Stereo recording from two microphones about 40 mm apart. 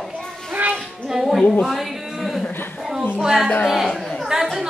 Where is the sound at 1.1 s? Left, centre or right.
Centre.